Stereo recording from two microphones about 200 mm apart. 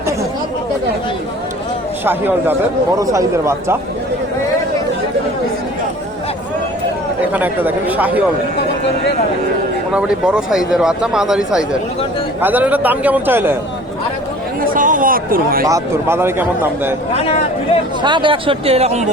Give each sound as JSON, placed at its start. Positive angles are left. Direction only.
{"t": 2.0, "sound": "a man's voice", "side_deg": -10}
{"t": 7.3, "sound": "a man's voice", "side_deg": -10}
{"t": 9.9, "sound": "a man's voice", "side_deg": -5}
{"t": 14.6, "sound": "a sound", "side_deg": -45}
{"t": 15.6, "sound": "a man's voice", "side_deg": -15}
{"t": 17.2, "sound": "speech", "side_deg": 30}
{"t": 18.0, "sound": "speech", "side_deg": -25}